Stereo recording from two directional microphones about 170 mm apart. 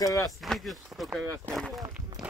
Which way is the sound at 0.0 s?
20° left (ahead or behind).